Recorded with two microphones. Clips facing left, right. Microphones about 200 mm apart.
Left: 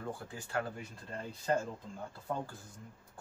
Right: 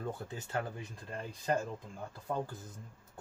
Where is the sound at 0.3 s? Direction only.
20° right (ahead or behind).